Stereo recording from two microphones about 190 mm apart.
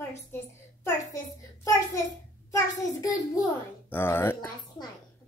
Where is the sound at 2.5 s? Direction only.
20° left (ahead or behind).